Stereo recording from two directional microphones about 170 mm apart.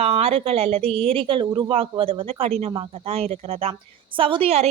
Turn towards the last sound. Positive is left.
turn(degrees=-35)  # may be behind; listen again after turning